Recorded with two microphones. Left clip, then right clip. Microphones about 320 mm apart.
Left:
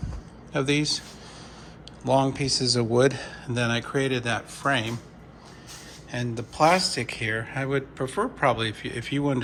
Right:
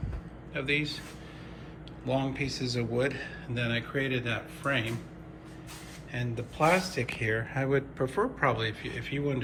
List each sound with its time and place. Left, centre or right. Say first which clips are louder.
0.5 s speech: left 6 dB; centre
2.0 s speech: left 8 dB; centre
6.1 s speech: left 5 dB; centre